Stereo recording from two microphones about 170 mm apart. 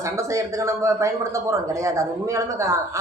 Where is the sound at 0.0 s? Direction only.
15° right (ahead or behind).